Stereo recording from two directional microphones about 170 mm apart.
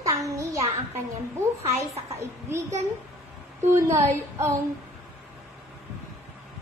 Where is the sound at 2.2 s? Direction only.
15° right (ahead or behind).